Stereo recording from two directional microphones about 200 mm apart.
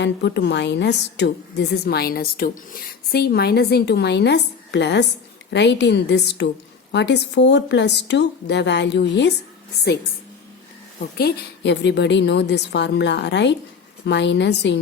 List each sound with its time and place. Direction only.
0.0 s a woman's voice: 60° left (ahead or behind)
11.2 s a woman's voice: 55° left (ahead or behind)